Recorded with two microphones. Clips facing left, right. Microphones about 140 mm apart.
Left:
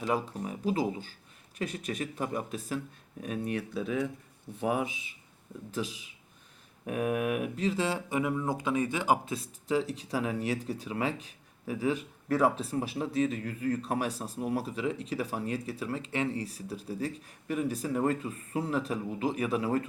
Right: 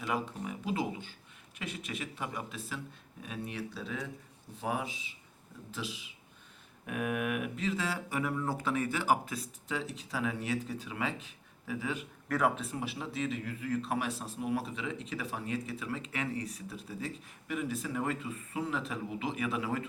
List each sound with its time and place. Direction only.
0.0 s speech: 35° left (ahead or behind); by 5.1 s 55° left (ahead or behind)
6.8 s speech: 35° left (ahead or behind)